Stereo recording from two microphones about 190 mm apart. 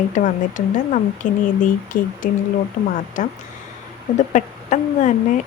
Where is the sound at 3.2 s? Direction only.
45° left (ahead or behind).